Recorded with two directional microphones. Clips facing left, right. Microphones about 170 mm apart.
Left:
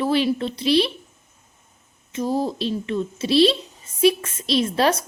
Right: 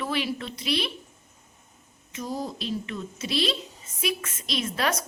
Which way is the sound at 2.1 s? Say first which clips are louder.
Left 9 dB; 25° left (ahead or behind).